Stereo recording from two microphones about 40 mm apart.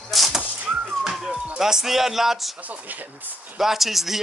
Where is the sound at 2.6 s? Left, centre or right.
Right.